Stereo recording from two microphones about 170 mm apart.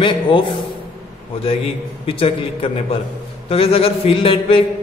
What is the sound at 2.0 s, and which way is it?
A man's voice, 30° left (ahead or behind).